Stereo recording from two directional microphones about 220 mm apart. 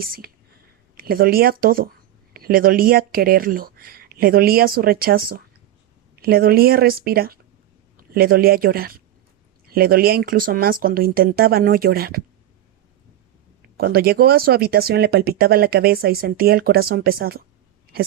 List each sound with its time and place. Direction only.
0.0 s a man's voice: 45° right (ahead or behind)
13.7 s speech: 45° right (ahead or behind)